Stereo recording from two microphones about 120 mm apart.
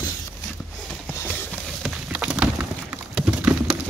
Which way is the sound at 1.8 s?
10° right (ahead or behind).